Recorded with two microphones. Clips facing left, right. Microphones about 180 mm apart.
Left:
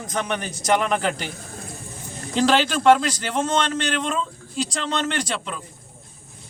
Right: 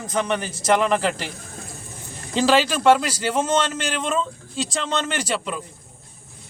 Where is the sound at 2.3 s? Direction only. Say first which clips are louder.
Right 1 dB; 5° right (ahead or behind).